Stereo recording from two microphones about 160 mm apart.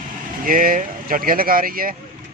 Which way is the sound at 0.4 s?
60° right (ahead or behind).